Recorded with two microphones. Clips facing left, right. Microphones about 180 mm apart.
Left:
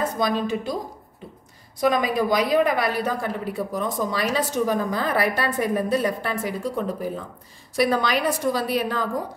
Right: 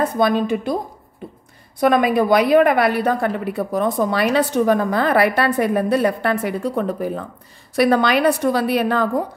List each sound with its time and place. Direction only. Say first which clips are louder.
0.0 s a woman's voice: right 6 dB; 55° right (ahead or behind)
1.8 s a woman's voice: right 5 dB; 60° right (ahead or behind)